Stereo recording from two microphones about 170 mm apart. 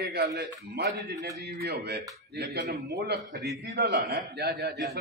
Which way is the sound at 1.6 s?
90° right.